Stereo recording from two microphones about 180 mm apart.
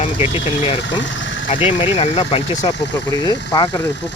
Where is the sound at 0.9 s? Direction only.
90° left.